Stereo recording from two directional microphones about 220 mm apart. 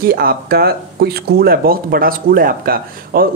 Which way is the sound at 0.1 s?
45° right (ahead or behind).